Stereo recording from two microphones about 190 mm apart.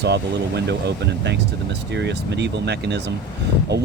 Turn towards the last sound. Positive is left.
turn(degrees=-65)  # may be behind; listen again after turning